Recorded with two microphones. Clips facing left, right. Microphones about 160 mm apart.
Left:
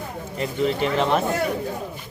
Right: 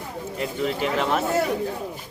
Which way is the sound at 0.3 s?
5° right (ahead or behind).